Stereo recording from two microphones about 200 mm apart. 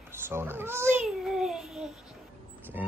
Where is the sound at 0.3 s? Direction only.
10° right (ahead or behind).